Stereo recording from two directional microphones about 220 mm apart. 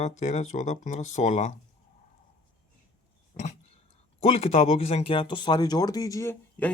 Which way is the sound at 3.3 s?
30° left (ahead or behind).